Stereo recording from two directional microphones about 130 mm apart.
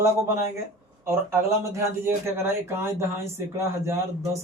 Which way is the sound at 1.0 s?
20° right (ahead or behind).